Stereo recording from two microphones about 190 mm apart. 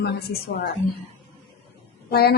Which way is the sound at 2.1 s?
55° left (ahead or behind).